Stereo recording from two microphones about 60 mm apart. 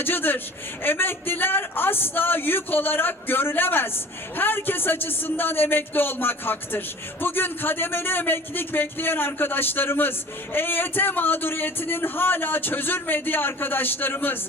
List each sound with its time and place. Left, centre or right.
0.0 s speech: left